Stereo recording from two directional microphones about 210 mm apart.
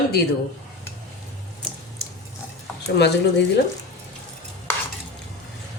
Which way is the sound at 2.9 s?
55° left (ahead or behind).